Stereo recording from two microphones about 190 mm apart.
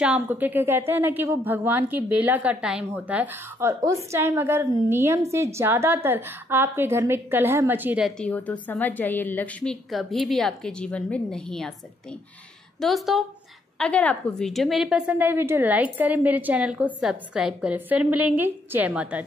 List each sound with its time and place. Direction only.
0.0 s a woman's voice: 5° right (ahead or behind)
8.2 s a woman's voice: 10° left (ahead or behind)
12.8 s a woman's voice: centre (ahead or behind)